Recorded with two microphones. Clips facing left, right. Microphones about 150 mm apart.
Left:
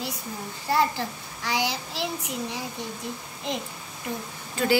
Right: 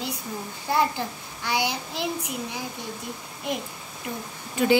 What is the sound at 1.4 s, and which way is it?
Speech, 10° right (ahead or behind).